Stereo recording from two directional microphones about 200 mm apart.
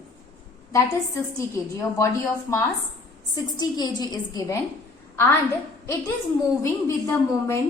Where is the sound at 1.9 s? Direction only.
15° left (ahead or behind).